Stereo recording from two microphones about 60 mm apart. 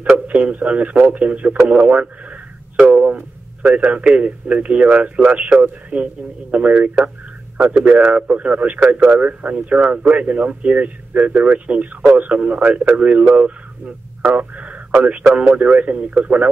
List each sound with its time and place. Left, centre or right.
0.1 s a man's voice: right